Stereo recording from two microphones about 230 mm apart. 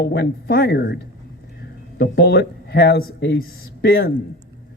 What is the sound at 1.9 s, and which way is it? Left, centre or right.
Speech, left.